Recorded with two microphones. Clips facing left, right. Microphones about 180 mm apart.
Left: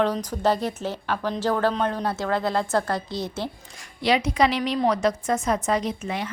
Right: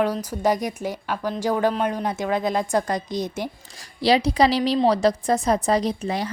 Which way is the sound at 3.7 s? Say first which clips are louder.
Right 3 dB; 35° right (ahead or behind).